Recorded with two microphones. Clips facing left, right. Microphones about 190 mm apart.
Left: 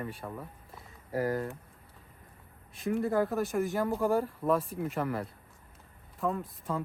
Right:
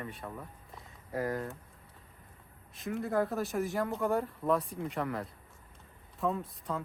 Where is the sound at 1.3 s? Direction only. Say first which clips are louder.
Left 3 dB; 30° left (ahead or behind).